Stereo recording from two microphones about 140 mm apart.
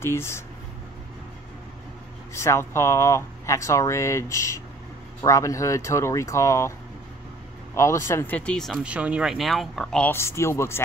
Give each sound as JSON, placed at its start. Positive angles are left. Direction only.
{"t": 0.0, "sound": "speech", "side_deg": 20}
{"t": 2.3, "sound": "speech", "side_deg": 20}
{"t": 7.7, "sound": "speech", "side_deg": 20}
{"t": 8.8, "sound": "speech", "side_deg": -10}
{"t": 10.1, "sound": "speech", "side_deg": 20}